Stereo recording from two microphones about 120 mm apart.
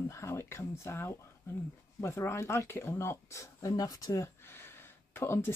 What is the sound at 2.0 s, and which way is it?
Speech, 25° left (ahead or behind).